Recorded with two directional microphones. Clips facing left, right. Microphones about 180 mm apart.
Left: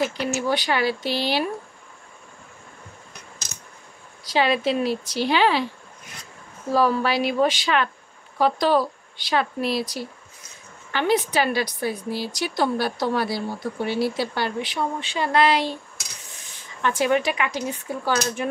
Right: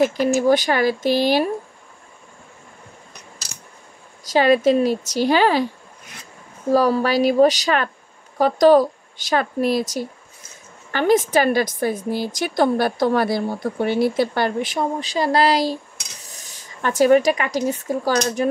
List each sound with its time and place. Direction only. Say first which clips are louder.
0.0 s a woman's voice: right 7 dB; 45° right (ahead or behind)
4.2 s a woman's voice: right 6 dB; 45° right (ahead or behind)
6.7 s a woman's voice: right 4 dB; 40° right (ahead or behind)